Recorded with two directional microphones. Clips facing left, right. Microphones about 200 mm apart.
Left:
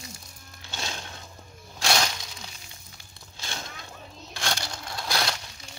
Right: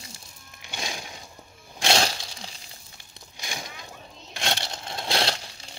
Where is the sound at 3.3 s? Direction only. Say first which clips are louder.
Right 1 dB; 15° right (ahead or behind).